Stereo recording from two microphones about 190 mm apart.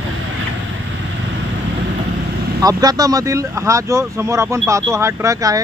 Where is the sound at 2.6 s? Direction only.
20° right (ahead or behind).